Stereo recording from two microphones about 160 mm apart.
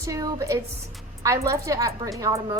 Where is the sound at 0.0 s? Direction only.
20° right (ahead or behind).